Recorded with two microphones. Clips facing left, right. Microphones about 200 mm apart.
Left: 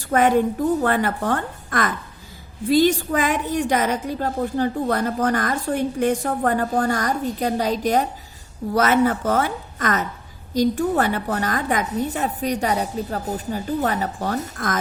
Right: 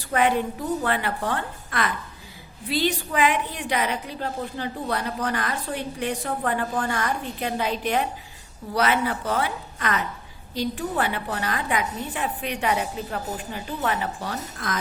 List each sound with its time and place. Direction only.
0.1 s a woman's voice: 45° left (ahead or behind)